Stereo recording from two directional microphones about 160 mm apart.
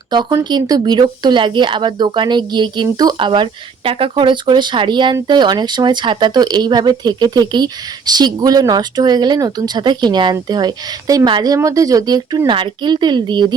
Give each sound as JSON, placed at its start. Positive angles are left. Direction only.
{"t": 0.1, "sound": "speech", "side_deg": -25}